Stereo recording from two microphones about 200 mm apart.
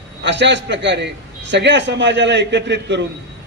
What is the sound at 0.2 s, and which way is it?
A man's voice, 60° right (ahead or behind).